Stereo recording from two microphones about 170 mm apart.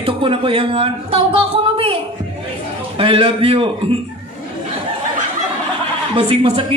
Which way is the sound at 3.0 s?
35° right (ahead or behind).